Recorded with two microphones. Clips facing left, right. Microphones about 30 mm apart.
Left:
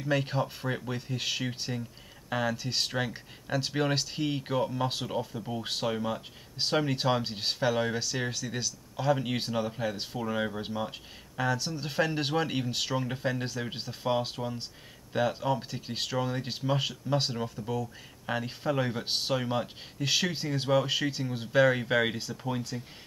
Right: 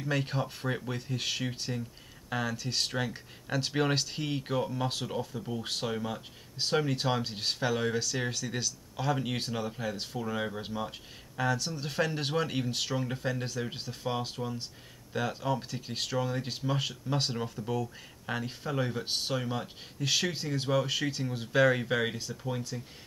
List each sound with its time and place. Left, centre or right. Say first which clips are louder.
0.0 s speech: left 3 dB; centre
22.1 s speech: left 2 dB; left
22.7 s speech: left 2 dB; centre